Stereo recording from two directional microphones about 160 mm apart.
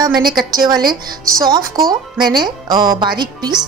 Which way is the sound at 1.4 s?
25° right (ahead or behind).